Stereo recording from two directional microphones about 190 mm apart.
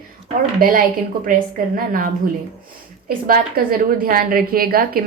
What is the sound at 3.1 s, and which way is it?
A woman's voice, 50° right (ahead or behind).